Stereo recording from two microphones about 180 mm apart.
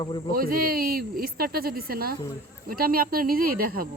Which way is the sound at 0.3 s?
55° right (ahead or behind).